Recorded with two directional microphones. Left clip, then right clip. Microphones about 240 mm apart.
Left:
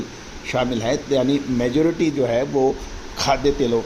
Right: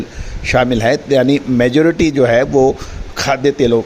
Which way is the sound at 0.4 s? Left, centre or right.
Right.